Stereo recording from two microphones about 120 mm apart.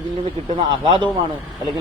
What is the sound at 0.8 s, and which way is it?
Speech, 40° right (ahead or behind).